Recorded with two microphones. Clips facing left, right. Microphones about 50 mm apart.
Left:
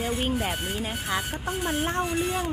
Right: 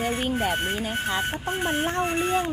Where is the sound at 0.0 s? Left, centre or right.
Right.